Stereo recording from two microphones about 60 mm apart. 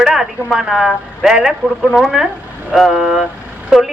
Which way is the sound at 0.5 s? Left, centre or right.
Centre.